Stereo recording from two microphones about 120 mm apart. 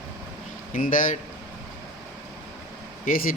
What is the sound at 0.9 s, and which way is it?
Speech, 90° left.